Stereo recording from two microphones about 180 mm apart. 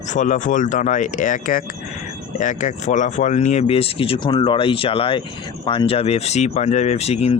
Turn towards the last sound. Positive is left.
turn(degrees=35)  # may be behind; listen again after turning